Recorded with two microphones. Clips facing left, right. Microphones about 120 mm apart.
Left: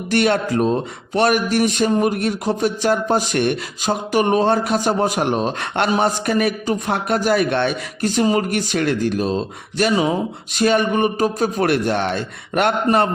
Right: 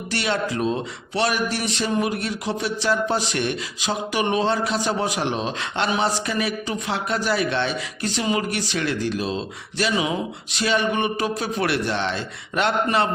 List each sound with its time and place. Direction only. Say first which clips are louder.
0.1 s speech: left 7 dB; 50° left (ahead or behind)